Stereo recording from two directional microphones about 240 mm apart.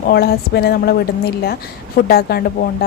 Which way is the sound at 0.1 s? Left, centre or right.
Left.